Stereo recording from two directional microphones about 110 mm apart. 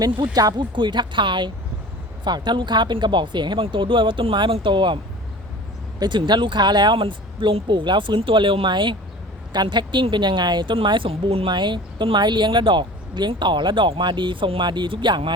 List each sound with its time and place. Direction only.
0.0 s speech: 35° right (ahead or behind)
6.0 s speech: 45° right (ahead or behind); by 11.5 s 60° right (ahead or behind)
11.5 s speech: 45° right (ahead or behind)